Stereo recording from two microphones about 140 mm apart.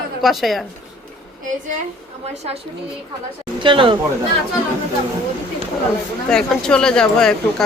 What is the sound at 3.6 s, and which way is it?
Speech, 35° right (ahead or behind).